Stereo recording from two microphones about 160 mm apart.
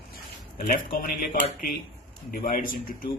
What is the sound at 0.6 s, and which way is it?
Speech, 60° left (ahead or behind).